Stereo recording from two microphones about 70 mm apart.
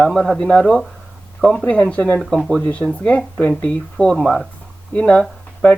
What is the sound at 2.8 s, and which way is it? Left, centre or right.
Speech, centre.